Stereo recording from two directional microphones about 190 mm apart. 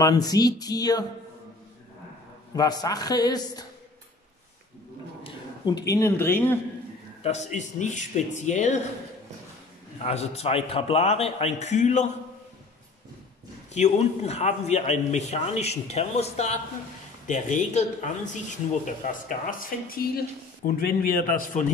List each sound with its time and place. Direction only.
0.0 s a man's voice: 20° left (ahead or behind)
2.5 s a man's voice: 20° left (ahead or behind)
5.2 s speech: 20° left (ahead or behind)
7.2 s speech: 35° left (ahead or behind)
10.0 s speech: 35° left (ahead or behind)
13.7 s a man's voice: 35° left (ahead or behind)